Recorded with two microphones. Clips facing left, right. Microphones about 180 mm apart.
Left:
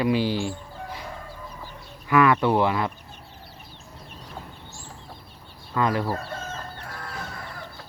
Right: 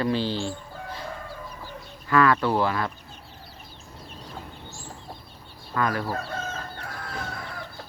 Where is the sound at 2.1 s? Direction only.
15° left (ahead or behind).